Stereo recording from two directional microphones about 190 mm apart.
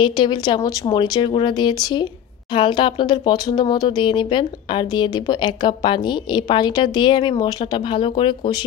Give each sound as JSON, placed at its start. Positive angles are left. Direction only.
{"t": 0.0, "sound": "speech", "side_deg": 25}